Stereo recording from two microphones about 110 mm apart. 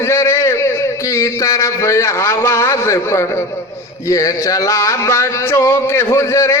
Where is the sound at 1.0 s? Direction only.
30° left (ahead or behind).